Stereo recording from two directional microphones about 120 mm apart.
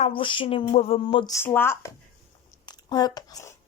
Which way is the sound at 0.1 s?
45° left (ahead or behind).